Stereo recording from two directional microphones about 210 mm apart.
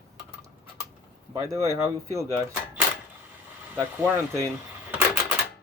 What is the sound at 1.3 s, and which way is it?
Speech, 15° right (ahead or behind).